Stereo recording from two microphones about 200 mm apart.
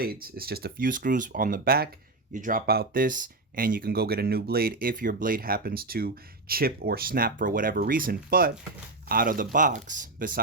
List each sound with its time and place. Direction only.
0.0 s speech: 50° right (ahead or behind)